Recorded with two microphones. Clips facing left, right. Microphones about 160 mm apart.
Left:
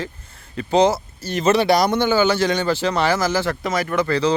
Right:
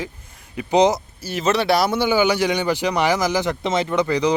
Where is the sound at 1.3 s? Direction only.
Centre (ahead or behind).